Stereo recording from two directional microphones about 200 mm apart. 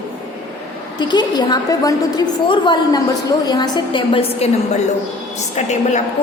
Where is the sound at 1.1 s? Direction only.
20° left (ahead or behind).